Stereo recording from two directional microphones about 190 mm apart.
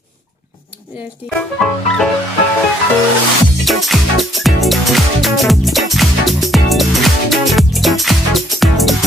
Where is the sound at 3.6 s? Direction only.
Centre (ahead or behind).